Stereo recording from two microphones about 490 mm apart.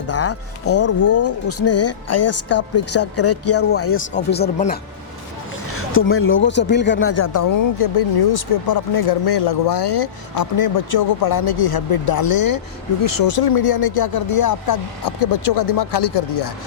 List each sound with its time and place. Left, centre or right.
0.1 s speech: left
7.3 s speech: left